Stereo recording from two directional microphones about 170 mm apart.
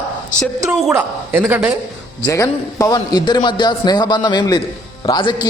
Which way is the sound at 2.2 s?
20° left (ahead or behind).